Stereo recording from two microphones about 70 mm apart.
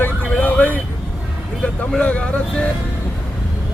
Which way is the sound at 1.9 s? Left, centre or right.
Centre.